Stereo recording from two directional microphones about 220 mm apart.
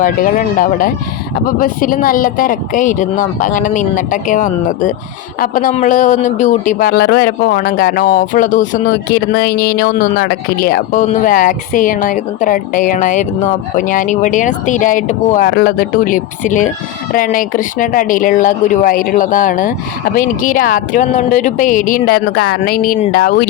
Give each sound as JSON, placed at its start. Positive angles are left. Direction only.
{"t": 0.0, "sound": "speech", "side_deg": 40}